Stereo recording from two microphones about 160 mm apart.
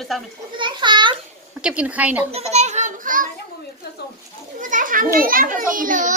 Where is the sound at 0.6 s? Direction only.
30° right (ahead or behind).